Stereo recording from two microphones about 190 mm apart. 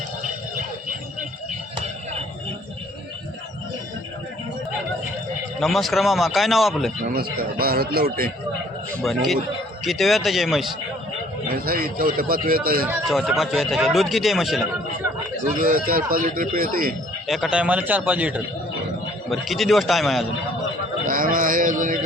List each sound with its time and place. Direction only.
0.2 s music: 45° right (ahead or behind)
5.5 s speech: centre (ahead or behind)
7.1 s speech: 50° right (ahead or behind)
9.0 s speech: centre (ahead or behind)
11.5 s speech: 50° right (ahead or behind)
12.9 s speech: centre (ahead or behind)
15.5 s speech: 50° right (ahead or behind)
17.2 s a man's voice: centre (ahead or behind)
21.1 s mantra: 45° right (ahead or behind)